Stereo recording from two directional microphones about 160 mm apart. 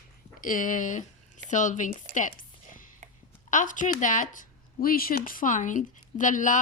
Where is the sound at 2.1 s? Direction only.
55° left (ahead or behind).